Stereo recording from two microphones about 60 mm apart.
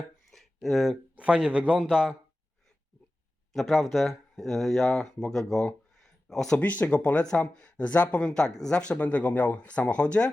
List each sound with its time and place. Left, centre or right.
0.3 s a sound: centre
1.1 s a man's voice: centre
3.5 s speech: centre
6.6 s speech: left